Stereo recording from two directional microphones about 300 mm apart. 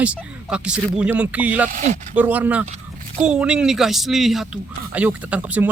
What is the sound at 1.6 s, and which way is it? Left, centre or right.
Speech, right.